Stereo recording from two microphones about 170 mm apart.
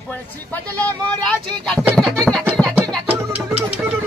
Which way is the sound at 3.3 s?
35° right (ahead or behind).